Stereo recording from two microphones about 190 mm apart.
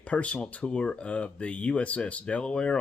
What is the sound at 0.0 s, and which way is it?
Speech, 5° left (ahead or behind).